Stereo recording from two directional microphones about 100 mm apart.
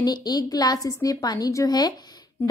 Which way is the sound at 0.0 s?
40° left (ahead or behind).